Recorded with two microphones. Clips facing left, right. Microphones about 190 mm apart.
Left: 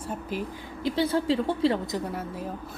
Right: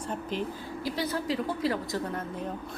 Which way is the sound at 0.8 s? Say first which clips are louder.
Left 6 dB; 25° left (ahead or behind).